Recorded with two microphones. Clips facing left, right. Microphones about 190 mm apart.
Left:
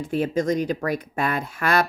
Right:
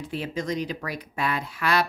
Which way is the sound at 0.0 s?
45° left (ahead or behind).